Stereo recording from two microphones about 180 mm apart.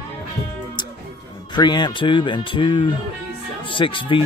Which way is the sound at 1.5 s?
25° left (ahead or behind).